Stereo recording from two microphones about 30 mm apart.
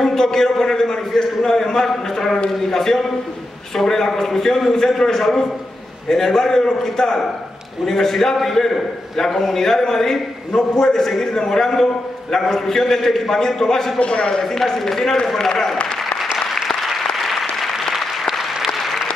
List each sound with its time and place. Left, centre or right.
0.0 s a man's voice: centre
13.9 s a man's voice: left
14.4 s a man's voice: centre
16.3 s applause: centre